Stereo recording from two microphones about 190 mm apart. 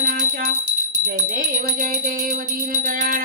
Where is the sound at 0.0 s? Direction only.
45° right (ahead or behind).